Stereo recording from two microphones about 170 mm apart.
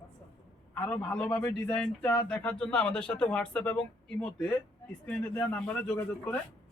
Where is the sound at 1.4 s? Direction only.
20° left (ahead or behind).